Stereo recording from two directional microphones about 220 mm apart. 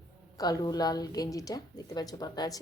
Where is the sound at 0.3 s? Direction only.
15° left (ahead or behind).